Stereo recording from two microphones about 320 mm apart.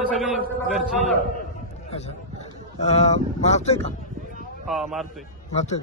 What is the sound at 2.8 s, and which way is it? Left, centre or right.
Speech, left.